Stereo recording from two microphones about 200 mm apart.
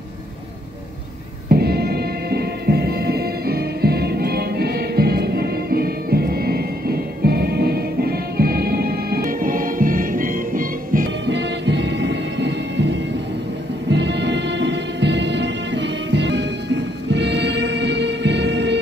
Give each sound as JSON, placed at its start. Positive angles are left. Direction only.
{"t": 1.5, "sound": "music", "side_deg": -50}
{"t": 11.2, "sound": "music", "side_deg": -60}